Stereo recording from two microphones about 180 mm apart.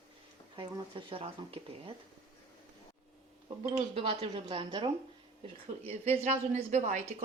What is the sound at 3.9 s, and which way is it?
Speech, 30° right (ahead or behind).